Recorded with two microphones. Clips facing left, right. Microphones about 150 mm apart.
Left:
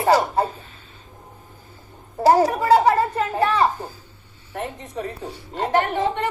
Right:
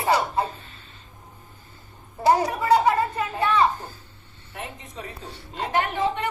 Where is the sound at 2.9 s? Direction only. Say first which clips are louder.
Left 3 dB; 40° left (ahead or behind).